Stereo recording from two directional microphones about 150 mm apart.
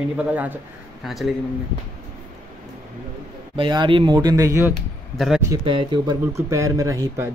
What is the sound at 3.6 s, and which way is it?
Speech, 35° right (ahead or behind).